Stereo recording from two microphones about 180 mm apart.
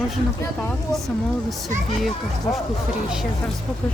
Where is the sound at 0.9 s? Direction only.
Centre (ahead or behind).